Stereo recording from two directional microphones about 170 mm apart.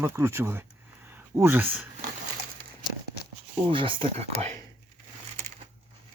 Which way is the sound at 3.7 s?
30° right (ahead or behind).